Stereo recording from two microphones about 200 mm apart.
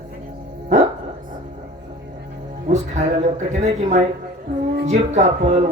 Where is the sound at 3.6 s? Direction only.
35° right (ahead or behind).